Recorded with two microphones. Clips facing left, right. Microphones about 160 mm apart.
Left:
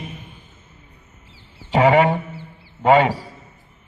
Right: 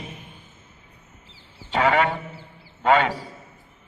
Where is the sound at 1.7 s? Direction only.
10° left (ahead or behind).